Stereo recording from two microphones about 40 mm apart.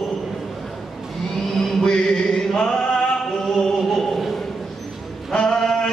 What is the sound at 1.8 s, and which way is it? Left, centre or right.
Chant, centre.